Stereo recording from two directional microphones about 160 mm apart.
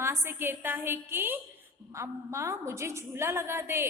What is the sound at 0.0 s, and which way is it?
A woman's voice, 15° right (ahead or behind).